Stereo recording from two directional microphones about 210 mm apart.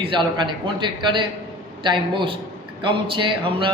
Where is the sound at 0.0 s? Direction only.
25° right (ahead or behind).